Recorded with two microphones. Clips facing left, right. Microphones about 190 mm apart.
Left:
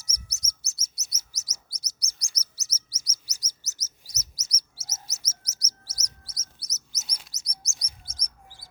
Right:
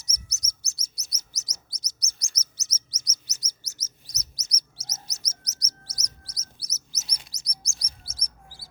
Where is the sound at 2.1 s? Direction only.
35° left (ahead or behind).